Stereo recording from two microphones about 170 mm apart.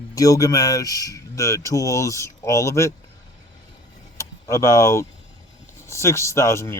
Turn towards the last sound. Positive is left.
turn(degrees=15)  # may be behind; listen again after turning